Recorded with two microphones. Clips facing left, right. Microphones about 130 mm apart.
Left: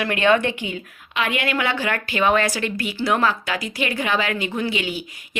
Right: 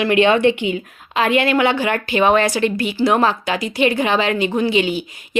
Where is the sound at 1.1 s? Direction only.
35° right (ahead or behind).